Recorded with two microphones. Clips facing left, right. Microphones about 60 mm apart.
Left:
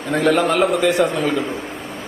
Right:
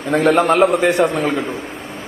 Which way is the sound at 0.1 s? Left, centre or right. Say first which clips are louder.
Right 3 dB; right.